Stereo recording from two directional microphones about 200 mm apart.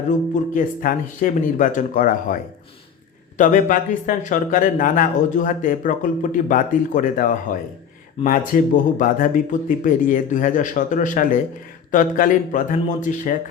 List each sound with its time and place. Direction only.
0.5 s speech: 40° left (ahead or behind)